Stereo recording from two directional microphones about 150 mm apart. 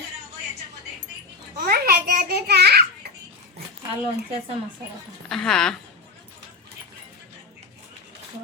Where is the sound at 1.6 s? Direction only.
90° right.